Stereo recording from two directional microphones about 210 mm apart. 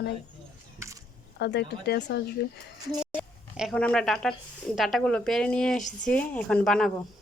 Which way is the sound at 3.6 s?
Centre (ahead or behind).